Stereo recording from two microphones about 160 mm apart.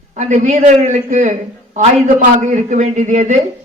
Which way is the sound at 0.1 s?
45° right (ahead or behind).